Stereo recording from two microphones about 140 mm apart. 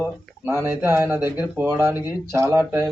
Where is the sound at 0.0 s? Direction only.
15° right (ahead or behind).